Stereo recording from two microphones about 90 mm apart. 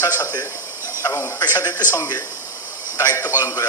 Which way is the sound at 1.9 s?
50° left (ahead or behind).